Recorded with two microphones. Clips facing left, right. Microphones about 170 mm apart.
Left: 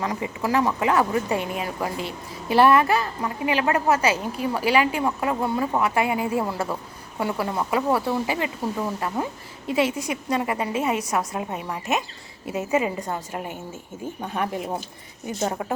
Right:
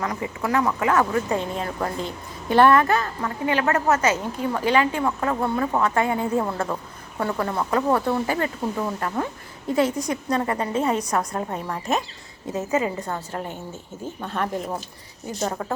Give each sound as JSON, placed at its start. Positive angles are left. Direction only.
{"t": 0.0, "sound": "a woman's voice", "side_deg": 20}
{"t": 15.4, "sound": "speech", "side_deg": 20}